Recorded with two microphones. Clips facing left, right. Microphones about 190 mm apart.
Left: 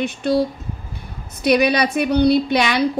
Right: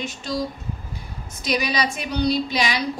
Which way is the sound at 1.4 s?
60° left (ahead or behind).